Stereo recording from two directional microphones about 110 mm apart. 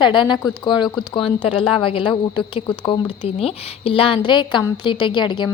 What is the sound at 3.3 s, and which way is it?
A woman's voice, 60° left (ahead or behind).